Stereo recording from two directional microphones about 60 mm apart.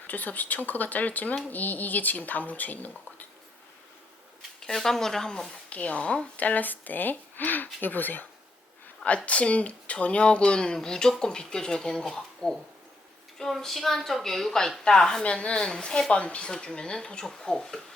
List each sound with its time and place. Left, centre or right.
0.1 s speech: left
4.6 s speech: centre
5.6 s a woman's voice: left